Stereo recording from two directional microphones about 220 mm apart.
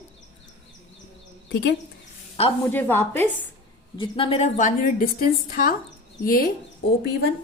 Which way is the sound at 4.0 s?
25° left (ahead or behind).